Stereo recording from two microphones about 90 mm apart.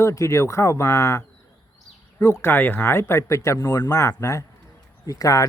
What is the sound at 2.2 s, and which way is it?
Speech, 35° left (ahead or behind).